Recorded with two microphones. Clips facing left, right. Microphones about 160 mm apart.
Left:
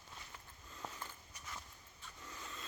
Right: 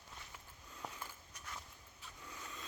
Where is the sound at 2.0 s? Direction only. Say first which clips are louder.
Even; 5° right (ahead or behind).